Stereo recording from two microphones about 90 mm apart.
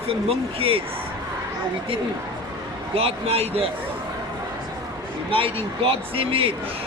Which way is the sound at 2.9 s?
90° right.